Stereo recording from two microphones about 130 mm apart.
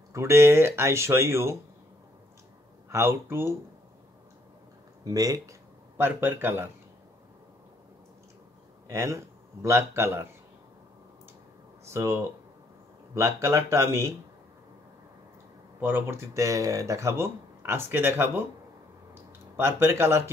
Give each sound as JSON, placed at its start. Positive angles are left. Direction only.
{"t": 0.1, "sound": "speech", "side_deg": -20}
{"t": 2.9, "sound": "speech", "side_deg": -20}
{"t": 5.0, "sound": "speech", "side_deg": -30}
{"t": 5.9, "sound": "speech", "side_deg": -15}
{"t": 8.9, "sound": "speech", "side_deg": -20}
{"t": 11.9, "sound": "speech", "side_deg": -20}
{"t": 15.8, "sound": "speech", "side_deg": -15}
{"t": 19.5, "sound": "speech", "side_deg": -20}